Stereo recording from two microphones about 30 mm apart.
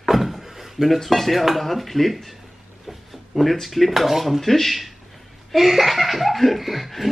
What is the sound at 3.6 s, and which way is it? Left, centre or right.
Speech, centre.